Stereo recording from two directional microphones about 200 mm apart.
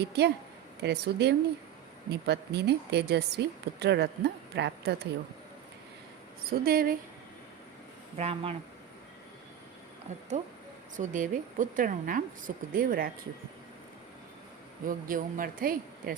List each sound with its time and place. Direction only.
0.0 s a woman's voice: 55° right (ahead or behind)
6.5 s speech: 50° right (ahead or behind)
8.2 s speech: 30° right (ahead or behind)
10.1 s a woman's voice: 35° right (ahead or behind)
14.8 s speech: 45° right (ahead or behind)